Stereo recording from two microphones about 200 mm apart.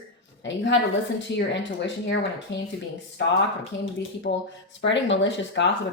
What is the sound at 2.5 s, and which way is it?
Speech, 65° left (ahead or behind).